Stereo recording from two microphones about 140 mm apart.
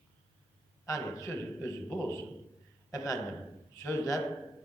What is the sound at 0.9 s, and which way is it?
A man's voice, 25° left (ahead or behind).